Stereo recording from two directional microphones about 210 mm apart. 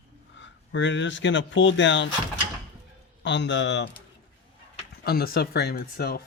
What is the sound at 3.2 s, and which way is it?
Speech, 60° left (ahead or behind).